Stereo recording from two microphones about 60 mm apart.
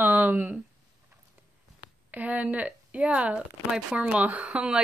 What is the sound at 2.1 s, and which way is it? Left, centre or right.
Speech, right.